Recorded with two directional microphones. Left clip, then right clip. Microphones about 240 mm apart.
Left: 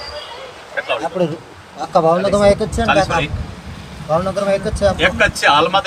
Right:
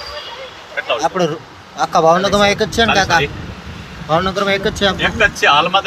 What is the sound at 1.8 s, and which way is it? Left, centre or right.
Speech, right.